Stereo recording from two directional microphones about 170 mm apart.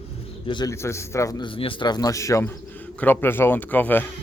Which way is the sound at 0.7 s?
15° left (ahead or behind).